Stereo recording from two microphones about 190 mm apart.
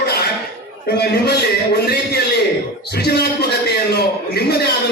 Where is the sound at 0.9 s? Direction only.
55° left (ahead or behind).